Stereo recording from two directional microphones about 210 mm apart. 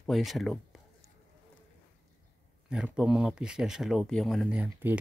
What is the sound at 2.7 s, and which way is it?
Speech, 5° right (ahead or behind).